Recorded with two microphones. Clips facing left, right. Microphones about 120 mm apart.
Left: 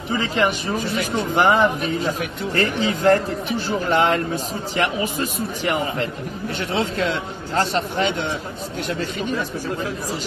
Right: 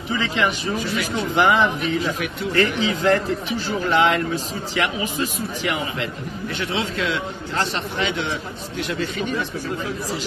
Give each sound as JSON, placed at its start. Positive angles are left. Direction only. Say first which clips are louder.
{"t": 0.2, "sound": "speech", "louder": "left 2 dB", "side_deg": 45}